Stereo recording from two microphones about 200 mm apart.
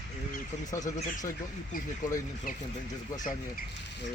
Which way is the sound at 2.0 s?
40° left (ahead or behind).